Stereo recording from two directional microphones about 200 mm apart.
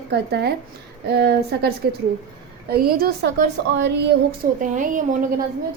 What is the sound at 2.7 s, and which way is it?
Speech, 50° right (ahead or behind).